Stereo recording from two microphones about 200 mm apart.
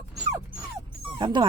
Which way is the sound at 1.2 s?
25° right (ahead or behind).